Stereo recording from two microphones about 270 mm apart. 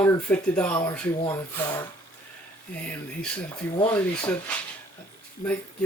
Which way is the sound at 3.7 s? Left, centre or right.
Centre.